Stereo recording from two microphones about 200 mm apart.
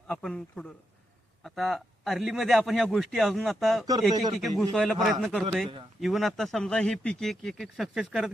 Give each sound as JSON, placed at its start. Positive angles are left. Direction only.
{"t": 0.1, "sound": "speech", "side_deg": 5}
{"t": 4.1, "sound": "speech", "side_deg": -20}
{"t": 4.4, "sound": "speech", "side_deg": 0}